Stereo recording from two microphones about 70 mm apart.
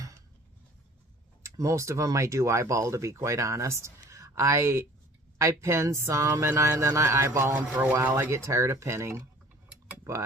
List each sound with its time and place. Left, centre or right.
1.4 s speech: right
7.5 s speech: right
8.4 s speech: right